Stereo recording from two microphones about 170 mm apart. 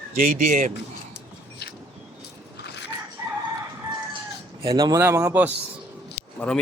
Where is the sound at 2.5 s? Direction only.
85° left.